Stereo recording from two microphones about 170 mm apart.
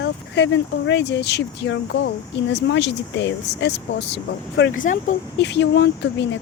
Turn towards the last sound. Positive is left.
turn(degrees=85)